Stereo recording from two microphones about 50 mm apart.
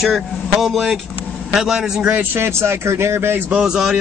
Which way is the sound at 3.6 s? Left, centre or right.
Centre.